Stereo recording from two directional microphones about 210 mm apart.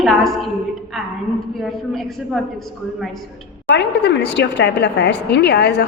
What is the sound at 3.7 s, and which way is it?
Speech, 55° left (ahead or behind).